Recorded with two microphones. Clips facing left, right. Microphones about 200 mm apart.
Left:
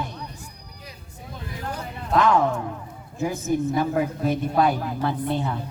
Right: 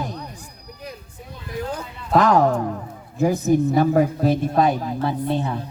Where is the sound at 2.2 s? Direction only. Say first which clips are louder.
Right 3 dB; 40° right (ahead or behind).